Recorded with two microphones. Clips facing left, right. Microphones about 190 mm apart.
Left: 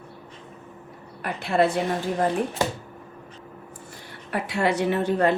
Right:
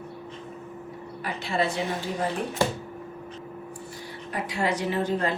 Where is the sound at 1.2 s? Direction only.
55° left (ahead or behind).